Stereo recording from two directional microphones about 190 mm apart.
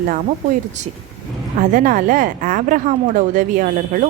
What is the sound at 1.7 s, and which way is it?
A woman's voice, 45° right (ahead or behind).